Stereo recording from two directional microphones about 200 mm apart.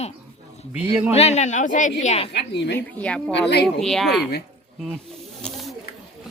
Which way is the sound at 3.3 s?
55° left (ahead or behind).